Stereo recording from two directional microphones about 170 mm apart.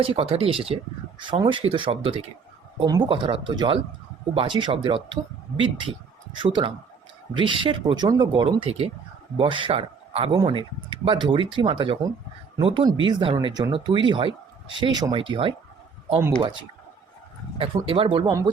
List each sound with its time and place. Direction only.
0.0 s speech: 35° right (ahead or behind)
17.6 s speech: 30° right (ahead or behind)
18.3 s speech: 20° right (ahead or behind)